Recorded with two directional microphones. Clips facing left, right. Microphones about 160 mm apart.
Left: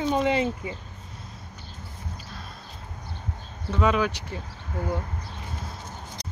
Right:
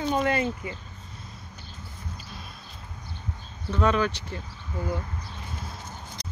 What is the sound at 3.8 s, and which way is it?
Speech, 5° left (ahead or behind).